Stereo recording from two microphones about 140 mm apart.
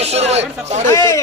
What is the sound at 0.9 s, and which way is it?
Speech, 20° left (ahead or behind).